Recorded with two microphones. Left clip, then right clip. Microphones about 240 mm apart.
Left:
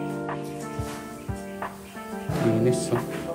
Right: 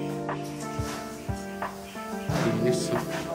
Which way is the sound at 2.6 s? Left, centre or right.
Centre.